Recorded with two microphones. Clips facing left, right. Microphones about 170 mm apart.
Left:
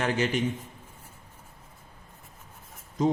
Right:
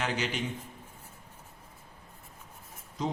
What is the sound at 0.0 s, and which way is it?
Speech, 50° left (ahead or behind).